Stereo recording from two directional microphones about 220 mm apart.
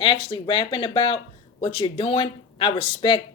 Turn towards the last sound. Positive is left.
turn(degrees=25)  # may be behind; listen again after turning